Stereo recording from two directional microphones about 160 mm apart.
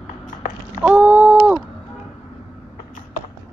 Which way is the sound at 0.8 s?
10° right (ahead or behind).